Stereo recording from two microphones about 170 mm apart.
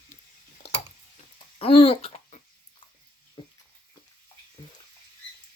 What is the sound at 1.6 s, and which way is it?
Babbling, 35° left (ahead or behind).